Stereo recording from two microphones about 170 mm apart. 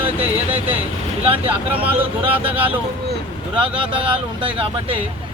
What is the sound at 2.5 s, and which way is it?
Speech, 10° right (ahead or behind).